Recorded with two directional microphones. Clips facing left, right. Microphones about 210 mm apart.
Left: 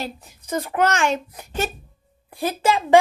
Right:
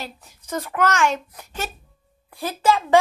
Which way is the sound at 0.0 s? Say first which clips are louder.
Left 5 dB; 20° left (ahead or behind).